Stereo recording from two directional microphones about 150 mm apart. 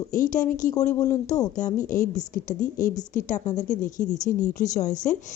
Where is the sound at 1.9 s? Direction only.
60° left (ahead or behind).